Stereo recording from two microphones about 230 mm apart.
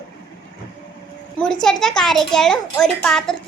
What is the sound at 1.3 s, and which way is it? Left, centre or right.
A child's voice, centre.